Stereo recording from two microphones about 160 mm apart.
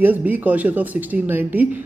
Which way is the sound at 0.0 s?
10° right (ahead or behind).